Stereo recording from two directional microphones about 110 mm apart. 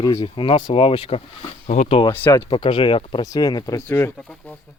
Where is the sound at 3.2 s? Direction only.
35° left (ahead or behind).